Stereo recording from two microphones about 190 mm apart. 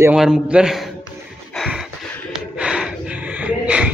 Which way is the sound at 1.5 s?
Centre (ahead or behind).